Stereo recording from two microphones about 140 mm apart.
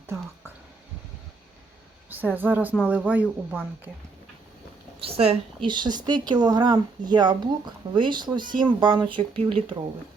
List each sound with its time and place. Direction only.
2.0 s speech: 15° right (ahead or behind)
4.9 s a sound: 45° right (ahead or behind)
5.6 s speech: 35° right (ahead or behind)